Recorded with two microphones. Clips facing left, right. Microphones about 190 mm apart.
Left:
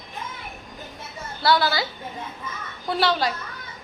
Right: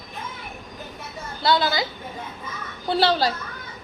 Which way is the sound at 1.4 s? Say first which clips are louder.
Even; 20° right (ahead or behind).